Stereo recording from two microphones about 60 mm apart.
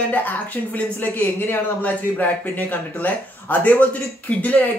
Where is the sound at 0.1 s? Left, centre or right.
Left.